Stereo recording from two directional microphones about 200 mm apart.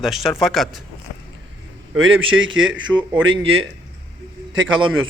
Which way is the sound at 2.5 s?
75° right (ahead or behind).